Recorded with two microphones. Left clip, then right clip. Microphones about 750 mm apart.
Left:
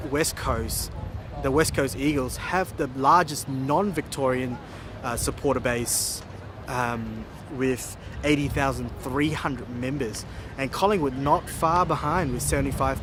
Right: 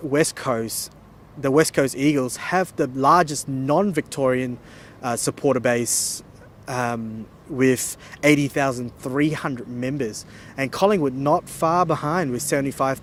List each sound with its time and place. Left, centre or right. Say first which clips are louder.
0.1 s speech: right 5 dB; right
8.2 s speech: right 6 dB; right